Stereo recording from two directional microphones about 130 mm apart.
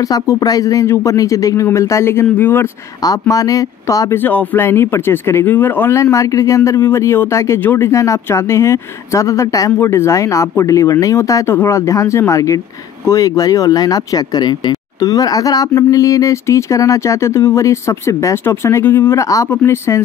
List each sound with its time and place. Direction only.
0.1 s speech: 30° left (ahead or behind)
3.0 s speech: 30° left (ahead or behind)
4.2 s speech: 15° left (ahead or behind)